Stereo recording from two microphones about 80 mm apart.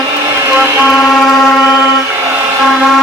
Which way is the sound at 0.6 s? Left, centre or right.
Centre.